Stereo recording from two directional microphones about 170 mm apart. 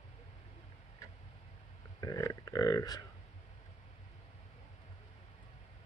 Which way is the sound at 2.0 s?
20° left (ahead or behind).